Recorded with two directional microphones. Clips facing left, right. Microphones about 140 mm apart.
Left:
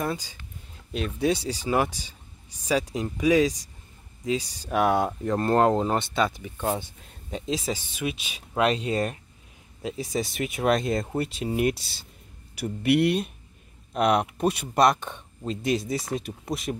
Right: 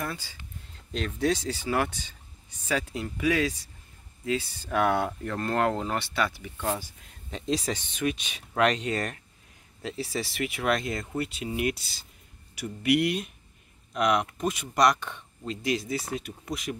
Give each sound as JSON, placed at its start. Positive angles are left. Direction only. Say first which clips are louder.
{"t": 0.0, "sound": "speech", "louder": "left 5 dB", "side_deg": 15}
{"t": 7.4, "sound": "speech", "louder": "right 1 dB", "side_deg": 0}
{"t": 8.5, "sound": "speech", "louder": "left 1 dB", "side_deg": 30}
{"t": 8.9, "sound": "speech", "louder": "left 4 dB", "side_deg": 15}